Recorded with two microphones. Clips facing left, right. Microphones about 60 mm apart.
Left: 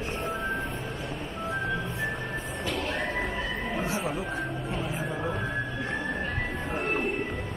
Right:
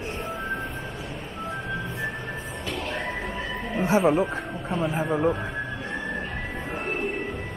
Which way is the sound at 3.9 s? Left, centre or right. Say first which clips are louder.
Right 10 dB; right.